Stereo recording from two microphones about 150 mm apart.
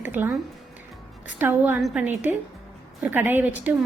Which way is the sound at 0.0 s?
15° right (ahead or behind).